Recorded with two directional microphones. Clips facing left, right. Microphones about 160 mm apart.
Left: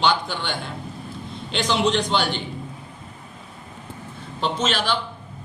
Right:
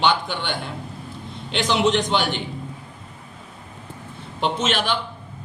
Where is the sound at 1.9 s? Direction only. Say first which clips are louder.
Right 1 dB; 15° right (ahead or behind).